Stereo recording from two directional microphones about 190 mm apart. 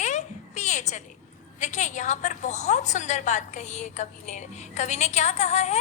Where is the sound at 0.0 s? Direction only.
40° left (ahead or behind).